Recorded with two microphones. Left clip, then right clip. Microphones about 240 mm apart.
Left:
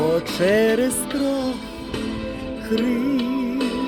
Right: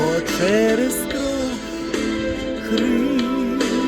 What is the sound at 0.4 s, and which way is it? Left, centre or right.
Music, centre.